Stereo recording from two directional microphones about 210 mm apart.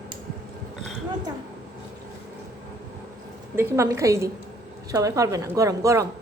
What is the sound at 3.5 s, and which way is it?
A child's voice, 10° right (ahead or behind).